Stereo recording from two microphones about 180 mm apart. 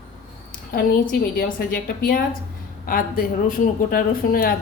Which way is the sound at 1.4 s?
55° left (ahead or behind).